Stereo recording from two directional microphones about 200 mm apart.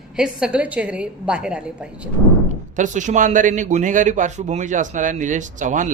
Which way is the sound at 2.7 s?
40° right (ahead or behind).